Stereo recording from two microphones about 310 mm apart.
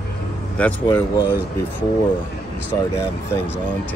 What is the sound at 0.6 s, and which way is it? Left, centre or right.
Speech, centre.